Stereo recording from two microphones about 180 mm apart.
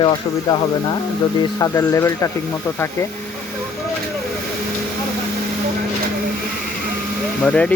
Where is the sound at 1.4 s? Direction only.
20° left (ahead or behind).